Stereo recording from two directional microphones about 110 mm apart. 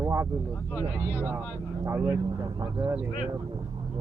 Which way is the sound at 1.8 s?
25° right (ahead or behind).